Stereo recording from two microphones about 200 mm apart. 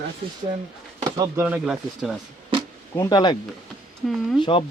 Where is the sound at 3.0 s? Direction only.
20° left (ahead or behind).